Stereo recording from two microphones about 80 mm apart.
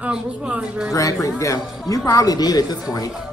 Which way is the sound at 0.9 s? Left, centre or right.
Left.